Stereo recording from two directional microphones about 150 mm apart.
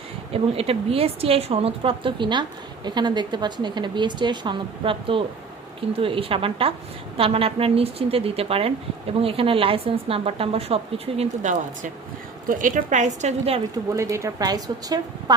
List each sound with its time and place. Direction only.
0.3 s a woman's voice: 40° right (ahead or behind)
12.5 s a woman's voice: 60° right (ahead or behind); by 13.6 s 45° right (ahead or behind)
13.9 s speech: 20° right (ahead or behind)